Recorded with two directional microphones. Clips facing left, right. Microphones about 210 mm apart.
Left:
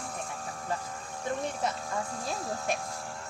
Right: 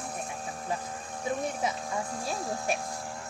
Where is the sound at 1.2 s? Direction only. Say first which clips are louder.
Right 1 dB; 10° right (ahead or behind).